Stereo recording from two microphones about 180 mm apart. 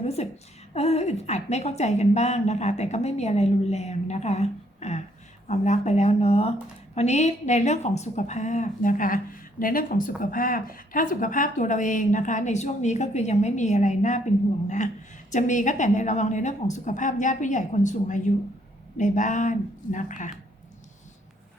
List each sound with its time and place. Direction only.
0.0 s a woman's voice: 35° left (ahead or behind)
15.3 s a woman's voice: 45° left (ahead or behind)